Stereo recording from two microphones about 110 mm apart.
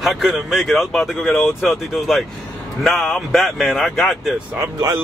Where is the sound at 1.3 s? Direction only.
20° left (ahead or behind).